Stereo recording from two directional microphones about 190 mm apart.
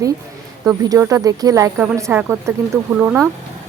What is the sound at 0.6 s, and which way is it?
Speech, 15° right (ahead or behind).